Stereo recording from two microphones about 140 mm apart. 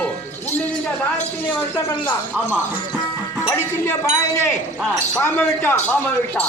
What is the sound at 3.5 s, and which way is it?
Speech, 20° left (ahead or behind).